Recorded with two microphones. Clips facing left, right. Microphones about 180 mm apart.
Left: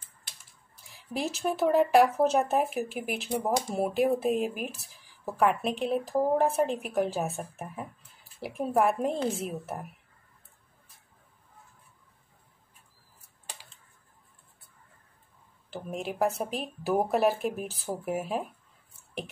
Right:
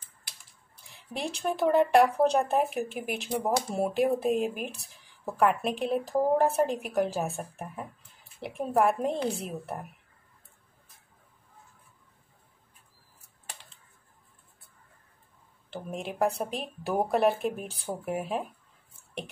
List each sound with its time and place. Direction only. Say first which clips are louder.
0.9 s speech: left 2 dB; centre (ahead or behind)
15.7 s speech: left 1 dB; centre (ahead or behind)